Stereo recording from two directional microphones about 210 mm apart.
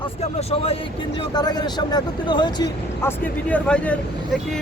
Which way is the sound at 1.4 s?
20° left (ahead or behind).